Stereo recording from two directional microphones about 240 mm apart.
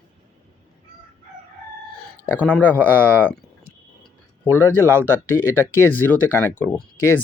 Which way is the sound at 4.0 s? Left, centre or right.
Centre.